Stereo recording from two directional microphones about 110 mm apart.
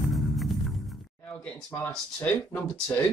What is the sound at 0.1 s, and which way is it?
Music, centre (ahead or behind).